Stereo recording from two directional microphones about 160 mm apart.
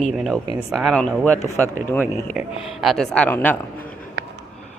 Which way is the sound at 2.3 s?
Centre (ahead or behind).